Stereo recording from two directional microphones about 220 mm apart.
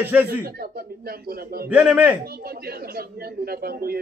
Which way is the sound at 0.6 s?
45° right (ahead or behind).